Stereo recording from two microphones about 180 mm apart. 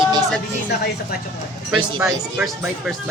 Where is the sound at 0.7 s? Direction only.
65° left (ahead or behind).